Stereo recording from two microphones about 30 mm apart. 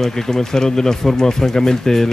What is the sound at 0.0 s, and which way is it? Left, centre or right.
Speech, centre.